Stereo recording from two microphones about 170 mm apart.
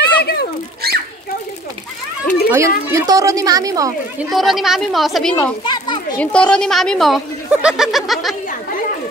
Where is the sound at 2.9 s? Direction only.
20° right (ahead or behind).